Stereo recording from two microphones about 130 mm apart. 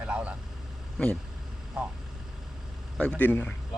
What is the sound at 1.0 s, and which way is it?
Speech, 10° left (ahead or behind).